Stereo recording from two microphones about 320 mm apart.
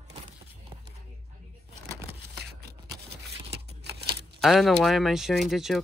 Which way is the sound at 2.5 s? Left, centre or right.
Right.